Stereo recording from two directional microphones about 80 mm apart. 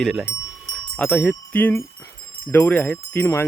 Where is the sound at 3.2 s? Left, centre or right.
Left.